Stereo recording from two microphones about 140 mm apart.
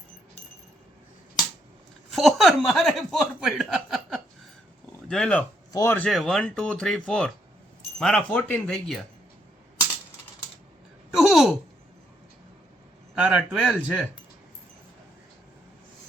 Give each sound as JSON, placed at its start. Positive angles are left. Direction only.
{"t": 2.1, "sound": "speech", "side_deg": 0}
{"t": 5.7, "sound": "speech", "side_deg": 15}
{"t": 6.1, "sound": "speech", "side_deg": 5}
{"t": 11.1, "sound": "a sound", "side_deg": 0}
{"t": 13.1, "sound": "speech", "side_deg": -5}